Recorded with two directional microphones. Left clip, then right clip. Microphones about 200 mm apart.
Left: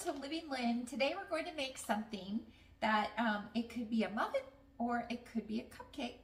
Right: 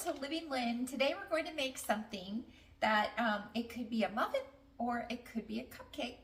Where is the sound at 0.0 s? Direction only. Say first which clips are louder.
Right 2 dB; 20° right (ahead or behind).